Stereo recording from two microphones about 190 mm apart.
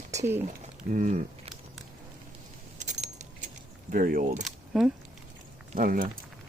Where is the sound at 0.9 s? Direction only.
40° right (ahead or behind).